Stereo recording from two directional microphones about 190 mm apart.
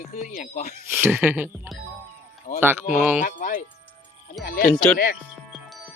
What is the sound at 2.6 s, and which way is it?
Speech, 10° right (ahead or behind).